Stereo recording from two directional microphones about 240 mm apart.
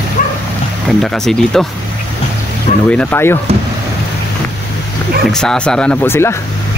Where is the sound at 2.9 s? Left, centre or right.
Centre.